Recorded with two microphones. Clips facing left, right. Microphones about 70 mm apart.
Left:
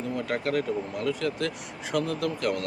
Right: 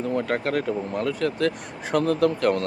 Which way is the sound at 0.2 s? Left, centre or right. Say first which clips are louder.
Right 3 dB; right.